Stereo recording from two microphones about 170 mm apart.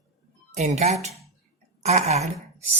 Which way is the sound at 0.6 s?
40° right (ahead or behind).